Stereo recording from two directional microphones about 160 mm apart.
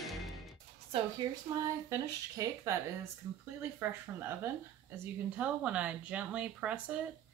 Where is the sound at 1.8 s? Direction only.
20° right (ahead or behind).